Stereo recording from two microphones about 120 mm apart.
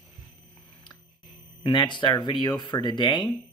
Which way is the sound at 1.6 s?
40° left (ahead or behind).